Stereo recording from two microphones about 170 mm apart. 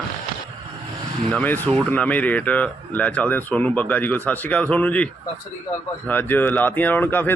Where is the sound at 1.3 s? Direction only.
10° left (ahead or behind).